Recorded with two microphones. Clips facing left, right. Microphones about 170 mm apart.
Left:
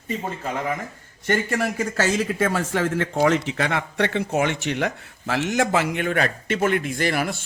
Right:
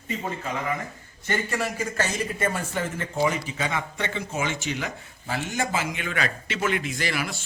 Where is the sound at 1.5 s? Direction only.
50° left (ahead or behind).